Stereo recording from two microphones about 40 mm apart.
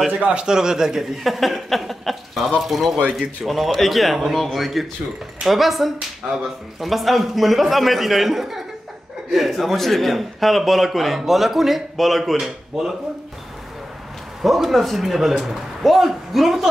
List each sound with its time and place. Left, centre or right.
0.2 s a man's voice: right
0.5 s a man's voice: centre
1.1 s a man's voice: centre
12.4 s a man's voice: centre
14.4 s a man's voice: centre